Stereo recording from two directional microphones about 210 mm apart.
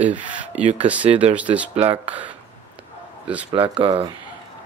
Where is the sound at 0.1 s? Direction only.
5° right (ahead or behind).